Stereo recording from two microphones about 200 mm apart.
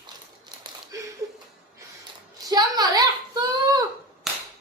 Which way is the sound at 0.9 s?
15° right (ahead or behind).